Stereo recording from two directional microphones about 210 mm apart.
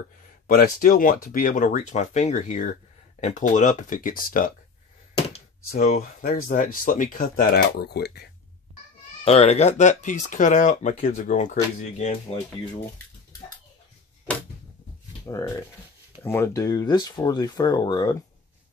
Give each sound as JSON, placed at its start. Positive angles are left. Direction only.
{"t": 0.6, "sound": "speech", "side_deg": 40}
{"t": 5.7, "sound": "speech", "side_deg": 40}
{"t": 9.2, "sound": "speech", "side_deg": 30}
{"t": 15.2, "sound": "speech", "side_deg": 15}